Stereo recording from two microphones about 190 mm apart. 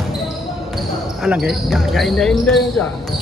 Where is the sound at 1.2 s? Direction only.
Centre (ahead or behind).